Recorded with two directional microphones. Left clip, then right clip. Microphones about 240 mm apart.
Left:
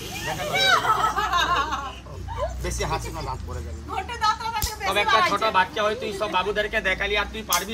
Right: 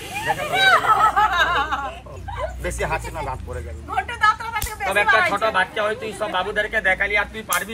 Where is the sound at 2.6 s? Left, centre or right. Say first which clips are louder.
Right 3 dB; centre.